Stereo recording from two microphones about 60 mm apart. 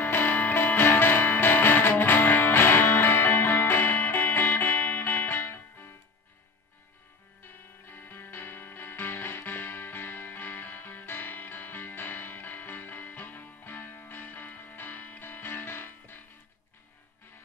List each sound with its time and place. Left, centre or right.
0.0 s music: left
0.4 s music: left
7.9 s music: left